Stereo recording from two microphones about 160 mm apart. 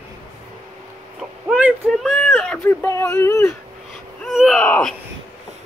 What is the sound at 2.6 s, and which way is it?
Speech, 15° left (ahead or behind).